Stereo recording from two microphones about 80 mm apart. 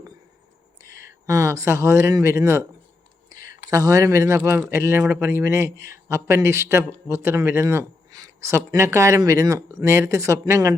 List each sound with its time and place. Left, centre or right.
0.8 s speech: right
3.2 s a sound: right
4.4 s speech: right
8.1 s speech: right